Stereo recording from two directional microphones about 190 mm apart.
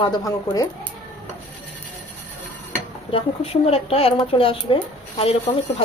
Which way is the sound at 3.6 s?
30° left (ahead or behind).